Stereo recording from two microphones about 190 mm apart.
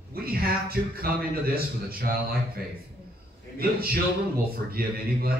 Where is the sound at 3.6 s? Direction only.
50° right (ahead or behind).